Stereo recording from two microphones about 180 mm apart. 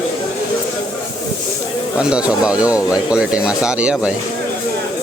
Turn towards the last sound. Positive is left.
turn(degrees=-5)  # may be behind; listen again after turning